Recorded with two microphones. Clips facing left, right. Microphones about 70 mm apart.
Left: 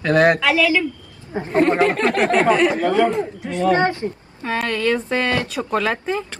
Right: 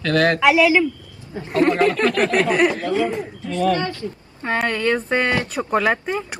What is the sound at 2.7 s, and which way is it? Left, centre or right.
Speech, left.